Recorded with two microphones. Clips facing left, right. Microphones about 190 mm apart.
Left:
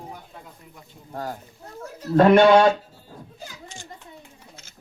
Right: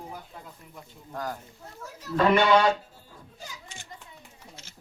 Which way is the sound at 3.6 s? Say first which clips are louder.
Left 6 dB; 60° right (ahead or behind).